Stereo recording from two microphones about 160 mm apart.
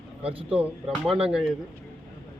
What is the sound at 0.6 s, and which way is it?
Speech, 5° right (ahead or behind).